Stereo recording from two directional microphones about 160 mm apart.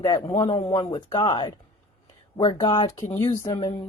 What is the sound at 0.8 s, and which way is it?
A woman's voice, 25° left (ahead or behind).